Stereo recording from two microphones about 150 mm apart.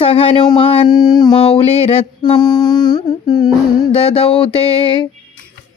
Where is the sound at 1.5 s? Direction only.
45° left (ahead or behind).